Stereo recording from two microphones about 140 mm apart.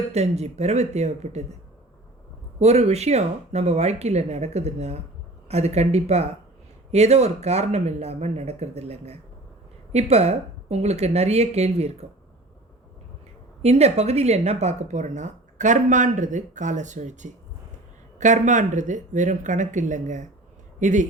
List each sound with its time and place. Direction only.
0.1 s speech: 50° right (ahead or behind)
2.6 s speech: 50° right (ahead or behind)
13.6 s speech: 50° right (ahead or behind)